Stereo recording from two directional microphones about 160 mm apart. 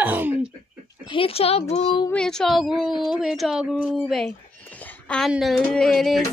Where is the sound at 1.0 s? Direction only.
35° left (ahead or behind).